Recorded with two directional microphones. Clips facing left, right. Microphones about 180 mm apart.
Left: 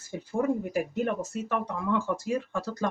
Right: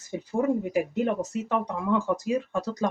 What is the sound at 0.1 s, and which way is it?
Speech, 15° right (ahead or behind).